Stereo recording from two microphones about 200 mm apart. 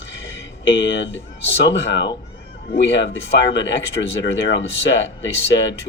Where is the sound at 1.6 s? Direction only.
60° left (ahead or behind).